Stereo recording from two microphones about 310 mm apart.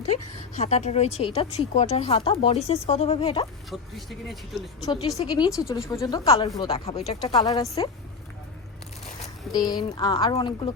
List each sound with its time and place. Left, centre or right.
0.5 s speech: left
3.7 s speech: centre
4.9 s a woman's voice: centre
9.2 s a woman's voice: centre